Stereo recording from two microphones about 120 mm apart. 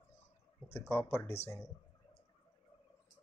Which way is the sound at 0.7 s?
15° left (ahead or behind).